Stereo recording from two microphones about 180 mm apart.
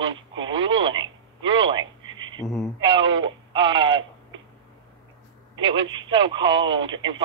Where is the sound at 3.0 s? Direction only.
90° right.